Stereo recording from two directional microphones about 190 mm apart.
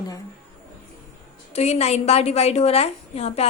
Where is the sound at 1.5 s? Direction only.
35° left (ahead or behind).